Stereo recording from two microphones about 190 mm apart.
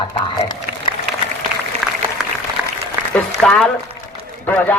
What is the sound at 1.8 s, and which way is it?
Applause, centre (ahead or behind).